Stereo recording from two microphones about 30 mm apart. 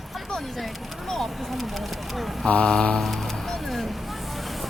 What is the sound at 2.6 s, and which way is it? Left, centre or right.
Speech, left.